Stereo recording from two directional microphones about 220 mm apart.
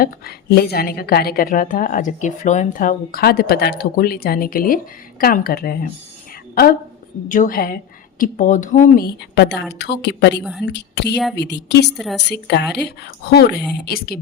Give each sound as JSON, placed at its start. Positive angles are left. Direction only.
{"t": 0.0, "sound": "a woman's voice", "side_deg": 45}